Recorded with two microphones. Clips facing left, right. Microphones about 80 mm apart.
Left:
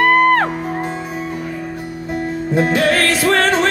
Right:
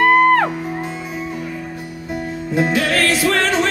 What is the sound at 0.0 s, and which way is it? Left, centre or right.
Music, left.